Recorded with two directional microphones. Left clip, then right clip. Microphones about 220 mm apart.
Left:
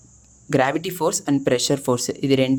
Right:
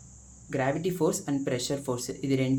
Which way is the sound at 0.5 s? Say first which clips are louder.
Left 9 dB; 50° left (ahead or behind).